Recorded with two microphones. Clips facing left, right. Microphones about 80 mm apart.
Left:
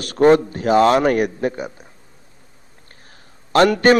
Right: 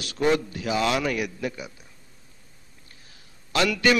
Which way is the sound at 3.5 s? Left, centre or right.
Left.